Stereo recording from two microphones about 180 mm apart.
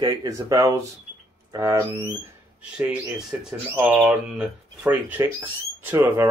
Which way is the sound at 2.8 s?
10° right (ahead or behind).